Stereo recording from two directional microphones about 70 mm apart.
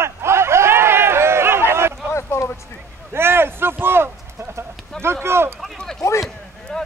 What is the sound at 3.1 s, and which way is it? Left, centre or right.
A man's voice, right.